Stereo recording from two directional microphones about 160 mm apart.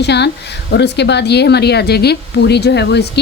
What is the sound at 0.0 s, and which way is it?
Speech, 90° left.